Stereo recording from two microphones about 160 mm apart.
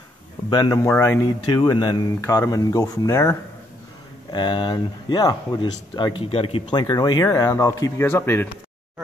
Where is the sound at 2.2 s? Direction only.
15° left (ahead or behind).